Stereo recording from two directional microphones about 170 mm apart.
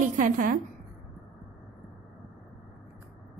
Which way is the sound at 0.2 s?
50° right (ahead or behind).